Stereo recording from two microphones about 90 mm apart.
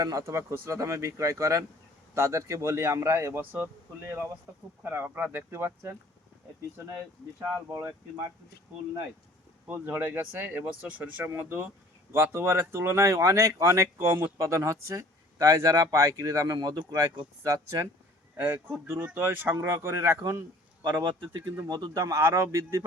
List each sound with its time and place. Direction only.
0.0 s speech: 40° right (ahead or behind)
9.6 s speech: 25° right (ahead or behind)
18.3 s speech: 15° right (ahead or behind)